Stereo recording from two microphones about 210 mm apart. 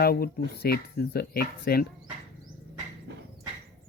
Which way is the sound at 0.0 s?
45° left (ahead or behind).